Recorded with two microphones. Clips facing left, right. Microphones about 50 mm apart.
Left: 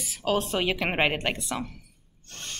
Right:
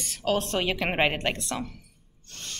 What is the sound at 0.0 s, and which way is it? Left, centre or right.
A woman's voice, centre.